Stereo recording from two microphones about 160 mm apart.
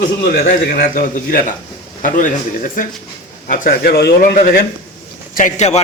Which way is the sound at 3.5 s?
70° left (ahead or behind).